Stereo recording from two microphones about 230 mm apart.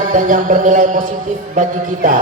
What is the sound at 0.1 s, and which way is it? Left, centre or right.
A woman's voice, right.